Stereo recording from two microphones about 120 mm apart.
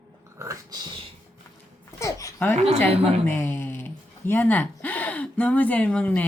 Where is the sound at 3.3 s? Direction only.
20° left (ahead or behind).